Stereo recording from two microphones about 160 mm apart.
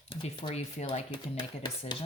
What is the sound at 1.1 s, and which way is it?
Speech, 30° left (ahead or behind).